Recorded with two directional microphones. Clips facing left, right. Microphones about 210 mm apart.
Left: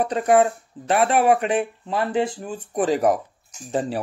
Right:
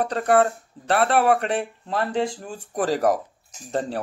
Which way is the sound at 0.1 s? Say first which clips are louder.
Left 2 dB; 5° left (ahead or behind).